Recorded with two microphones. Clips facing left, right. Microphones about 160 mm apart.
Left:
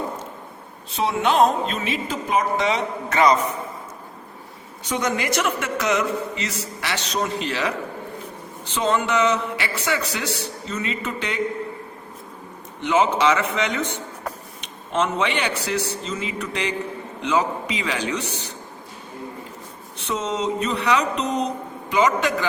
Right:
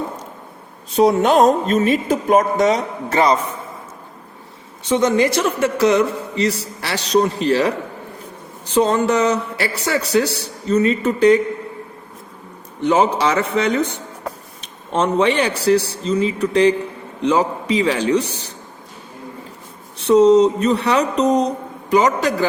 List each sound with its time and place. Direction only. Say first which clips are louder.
0.9 s speech: right 6 dB; 40° right (ahead or behind)
4.8 s a man's voice: right 9 dB; 30° right (ahead or behind)
12.8 s a man's voice: right 3 dB; 35° right (ahead or behind)
14.9 s a man's voice: right 6 dB; 35° right (ahead or behind)
20.1 s a man's voice: right 14 dB; 35° right (ahead or behind)